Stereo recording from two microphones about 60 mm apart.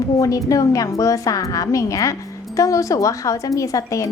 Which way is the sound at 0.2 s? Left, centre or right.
Left.